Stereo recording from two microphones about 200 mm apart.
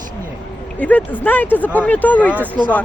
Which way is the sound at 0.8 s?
5° left (ahead or behind).